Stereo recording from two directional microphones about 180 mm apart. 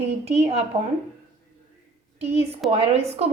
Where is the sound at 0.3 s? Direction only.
35° right (ahead or behind).